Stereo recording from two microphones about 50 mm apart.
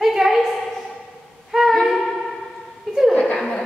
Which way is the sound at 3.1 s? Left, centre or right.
Left.